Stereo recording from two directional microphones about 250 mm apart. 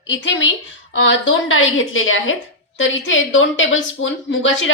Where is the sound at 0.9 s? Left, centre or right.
Left.